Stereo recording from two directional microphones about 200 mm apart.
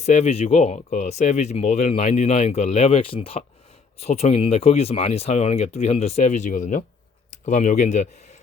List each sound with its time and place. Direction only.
0.0 s speech: 35° left (ahead or behind)